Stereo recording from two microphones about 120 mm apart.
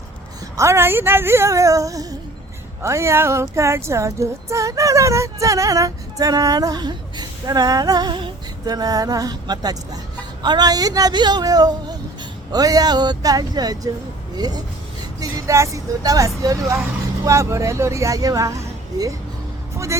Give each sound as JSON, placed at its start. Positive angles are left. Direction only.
{"t": 0.5, "sound": "female singing", "side_deg": -25}
{"t": 10.4, "sound": "speech", "side_deg": -35}
{"t": 16.4, "sound": "female singing", "side_deg": -30}
{"t": 19.7, "sound": "speech", "side_deg": -25}